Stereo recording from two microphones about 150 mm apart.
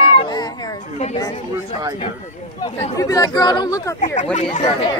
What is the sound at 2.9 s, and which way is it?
Speech, 25° left (ahead or behind).